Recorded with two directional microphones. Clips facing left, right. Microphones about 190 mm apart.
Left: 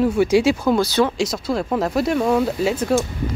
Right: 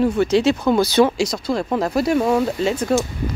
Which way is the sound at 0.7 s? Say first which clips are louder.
Right 3 dB; 15° right (ahead or behind).